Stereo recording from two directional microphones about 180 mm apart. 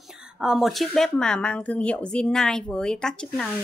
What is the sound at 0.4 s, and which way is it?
Speech, centre (ahead or behind).